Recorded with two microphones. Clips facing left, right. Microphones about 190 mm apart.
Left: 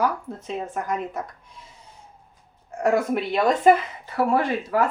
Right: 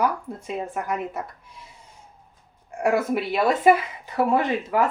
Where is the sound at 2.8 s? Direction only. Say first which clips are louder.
Left 1 dB; 5° right (ahead or behind).